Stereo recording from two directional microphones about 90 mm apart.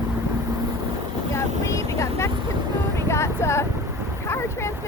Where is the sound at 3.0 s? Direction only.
30° left (ahead or behind).